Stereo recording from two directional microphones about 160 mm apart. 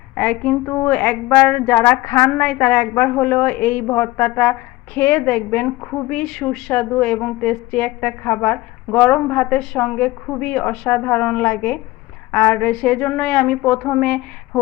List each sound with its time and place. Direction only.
0.2 s a woman's voice: 10° left (ahead or behind)